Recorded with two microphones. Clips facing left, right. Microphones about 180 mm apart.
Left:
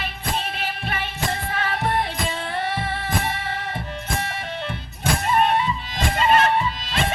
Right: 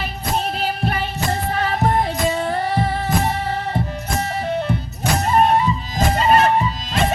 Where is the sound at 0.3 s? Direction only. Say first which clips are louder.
Right 9 dB; 40° right (ahead or behind).